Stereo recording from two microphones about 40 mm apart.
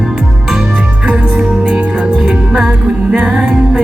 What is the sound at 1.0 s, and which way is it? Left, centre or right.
Music, right.